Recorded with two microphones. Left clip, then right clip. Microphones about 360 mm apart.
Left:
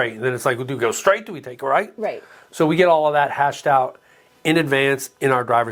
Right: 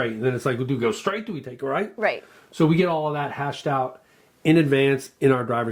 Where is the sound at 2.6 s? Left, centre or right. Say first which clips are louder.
Left 6 dB; left.